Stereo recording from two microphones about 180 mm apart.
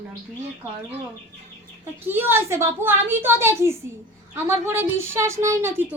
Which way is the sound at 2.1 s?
10° right (ahead or behind).